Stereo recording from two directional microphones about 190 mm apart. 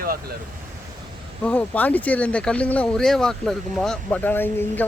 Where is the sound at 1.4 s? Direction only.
5° left (ahead or behind).